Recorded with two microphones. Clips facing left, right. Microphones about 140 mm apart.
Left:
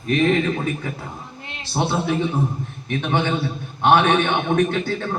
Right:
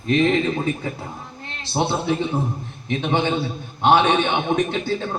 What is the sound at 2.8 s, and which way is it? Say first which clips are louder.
A man's voice: right 1 dB; 20° right (ahead or behind).